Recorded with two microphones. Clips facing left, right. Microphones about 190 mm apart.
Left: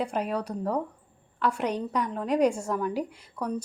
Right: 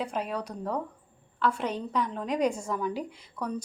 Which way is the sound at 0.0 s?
10° left (ahead or behind).